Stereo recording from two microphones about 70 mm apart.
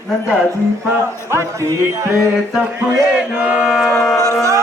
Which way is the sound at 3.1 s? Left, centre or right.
Centre.